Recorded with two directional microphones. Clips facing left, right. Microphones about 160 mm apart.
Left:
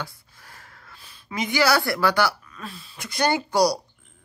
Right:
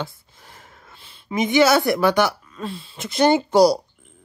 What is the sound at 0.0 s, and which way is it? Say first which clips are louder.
Speech: right 5 dB; 20° right (ahead or behind).